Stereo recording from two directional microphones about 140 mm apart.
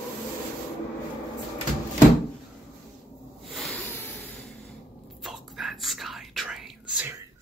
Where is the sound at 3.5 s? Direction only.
Centre (ahead or behind).